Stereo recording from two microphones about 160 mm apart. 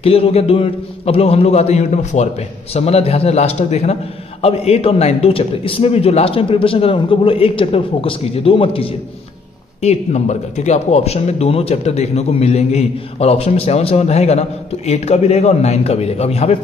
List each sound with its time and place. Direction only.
0.0 s a man's voice: 40° left (ahead or behind)